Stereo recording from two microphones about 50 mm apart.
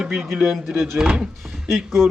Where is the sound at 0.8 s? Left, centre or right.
Centre.